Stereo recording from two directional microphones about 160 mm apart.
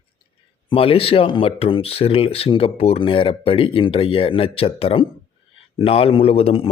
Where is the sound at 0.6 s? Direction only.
35° left (ahead or behind).